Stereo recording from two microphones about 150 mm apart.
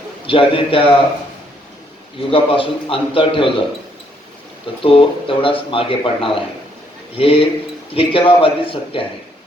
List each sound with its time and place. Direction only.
0.3 s speech: 35° left (ahead or behind)
2.3 s speech: 35° left (ahead or behind)
4.8 s speech: 35° left (ahead or behind)